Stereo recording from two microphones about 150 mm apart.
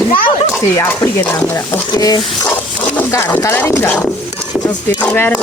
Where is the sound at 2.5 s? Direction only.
10° left (ahead or behind).